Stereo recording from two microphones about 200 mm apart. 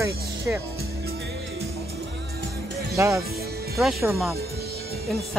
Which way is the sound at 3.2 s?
50° right (ahead or behind).